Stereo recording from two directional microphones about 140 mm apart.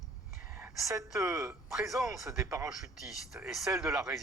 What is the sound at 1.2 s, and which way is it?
Speech, 20° right (ahead or behind).